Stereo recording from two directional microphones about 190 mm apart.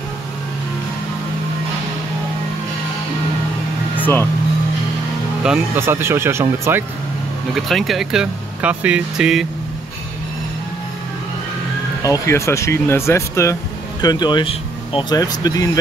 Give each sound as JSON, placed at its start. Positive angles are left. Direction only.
{"t": 4.0, "sound": "speech", "side_deg": 10}
{"t": 5.4, "sound": "speech", "side_deg": -10}
{"t": 7.5, "sound": "speech", "side_deg": 0}
{"t": 12.0, "sound": "speech", "side_deg": 15}